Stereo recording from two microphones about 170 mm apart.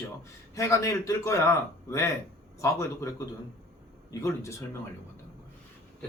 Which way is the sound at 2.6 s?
20° left (ahead or behind).